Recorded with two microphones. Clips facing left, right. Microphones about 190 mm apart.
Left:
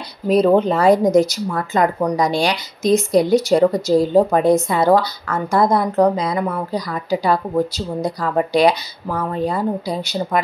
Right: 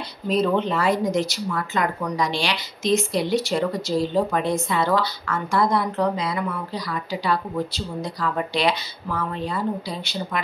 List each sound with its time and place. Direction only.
0.4 s speech: 40° left (ahead or behind)